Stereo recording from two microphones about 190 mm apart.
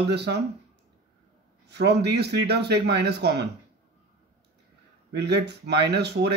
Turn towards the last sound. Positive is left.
turn(degrees=-60)  # may be behind; listen again after turning